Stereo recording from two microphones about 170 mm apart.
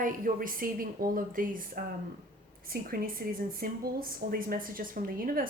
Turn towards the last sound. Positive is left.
turn(degrees=-55)  # may be behind; listen again after turning